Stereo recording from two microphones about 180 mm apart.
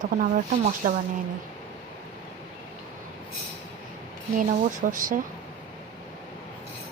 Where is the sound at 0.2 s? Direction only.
45° right (ahead or behind).